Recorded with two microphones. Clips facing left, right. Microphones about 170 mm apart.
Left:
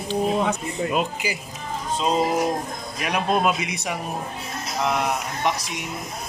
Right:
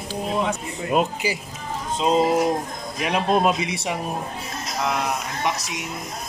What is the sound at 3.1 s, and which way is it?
Speech, 30° right (ahead or behind).